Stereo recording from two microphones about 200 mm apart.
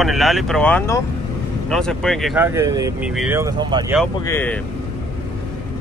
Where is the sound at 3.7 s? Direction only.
25° right (ahead or behind).